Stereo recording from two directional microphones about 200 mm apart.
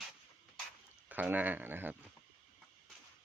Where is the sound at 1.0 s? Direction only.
10° right (ahead or behind).